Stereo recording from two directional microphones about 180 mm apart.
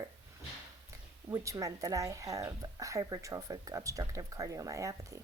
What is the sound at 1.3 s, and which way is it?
Speech, 20° right (ahead or behind).